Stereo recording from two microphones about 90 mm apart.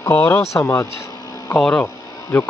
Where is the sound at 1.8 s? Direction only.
25° left (ahead or behind).